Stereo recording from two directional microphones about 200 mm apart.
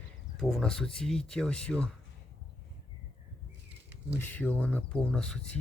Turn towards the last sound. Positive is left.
turn(degrees=5)  # may be behind; listen again after turning